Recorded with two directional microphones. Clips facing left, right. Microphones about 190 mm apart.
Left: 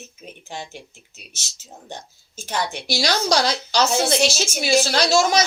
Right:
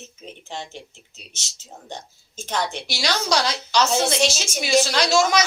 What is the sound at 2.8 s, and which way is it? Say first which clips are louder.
A woman's voice: left 3 dB; 40° left (ahead or behind).